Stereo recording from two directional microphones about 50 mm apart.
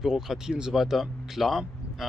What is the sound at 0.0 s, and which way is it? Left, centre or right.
A man's voice, centre.